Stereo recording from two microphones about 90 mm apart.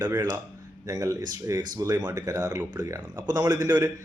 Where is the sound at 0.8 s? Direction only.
40° right (ahead or behind).